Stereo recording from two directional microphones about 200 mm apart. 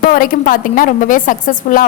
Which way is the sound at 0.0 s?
45° left (ahead or behind).